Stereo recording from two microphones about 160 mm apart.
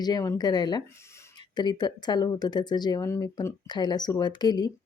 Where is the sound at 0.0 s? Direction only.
25° left (ahead or behind).